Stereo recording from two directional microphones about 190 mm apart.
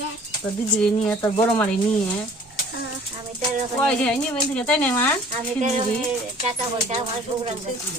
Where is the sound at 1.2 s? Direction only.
20° left (ahead or behind).